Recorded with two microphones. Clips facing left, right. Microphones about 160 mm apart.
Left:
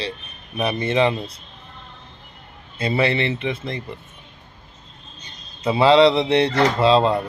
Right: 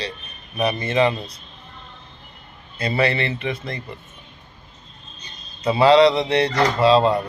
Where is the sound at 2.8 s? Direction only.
25° left (ahead or behind).